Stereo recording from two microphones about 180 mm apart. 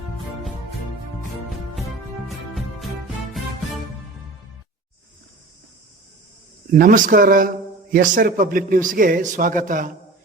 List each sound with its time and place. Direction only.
2.2 s music: centre (ahead or behind)
6.7 s a man's voice: 50° right (ahead or behind)